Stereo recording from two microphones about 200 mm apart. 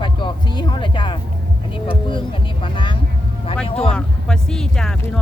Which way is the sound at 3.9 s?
5° left (ahead or behind).